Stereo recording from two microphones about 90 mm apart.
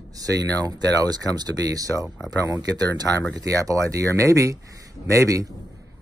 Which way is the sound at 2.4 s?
40° right (ahead or behind).